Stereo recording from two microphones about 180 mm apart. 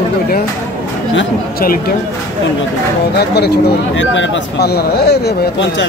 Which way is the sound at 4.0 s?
90° left.